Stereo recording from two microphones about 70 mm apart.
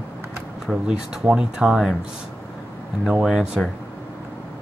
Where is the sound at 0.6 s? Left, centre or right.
Centre.